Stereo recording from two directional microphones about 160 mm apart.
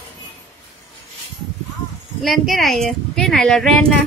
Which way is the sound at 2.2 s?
Centre (ahead or behind).